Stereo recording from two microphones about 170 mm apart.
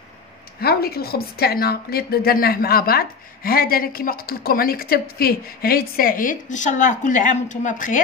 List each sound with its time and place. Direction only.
0.6 s a woman's voice: 65° left (ahead or behind); by 8.0 s 50° left (ahead or behind)